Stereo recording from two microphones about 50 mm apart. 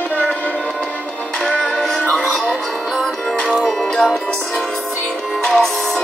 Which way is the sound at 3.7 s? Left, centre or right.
Centre.